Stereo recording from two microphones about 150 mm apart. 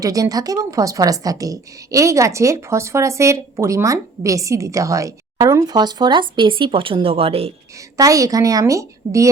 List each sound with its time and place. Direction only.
0.0 s a woman's voice: 25° right (ahead or behind); by 7.5 s 40° right (ahead or behind)
7.9 s a woman's voice: 20° right (ahead or behind)